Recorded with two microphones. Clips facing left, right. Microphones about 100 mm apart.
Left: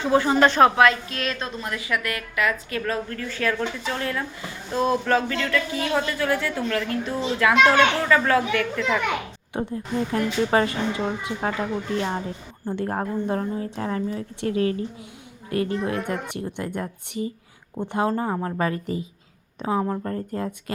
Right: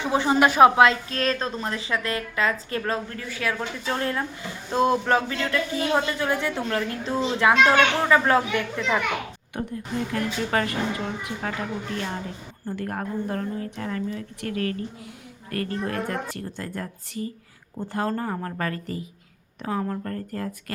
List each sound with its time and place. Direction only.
0.0 s a woman's voice: 15° right (ahead or behind)
0.8 s speech: 30° right (ahead or behind)
3.1 s a woman's voice: 15° right (ahead or behind)
3.8 s speech: 35° right (ahead or behind)
9.5 s a woman's voice: 30° left (ahead or behind)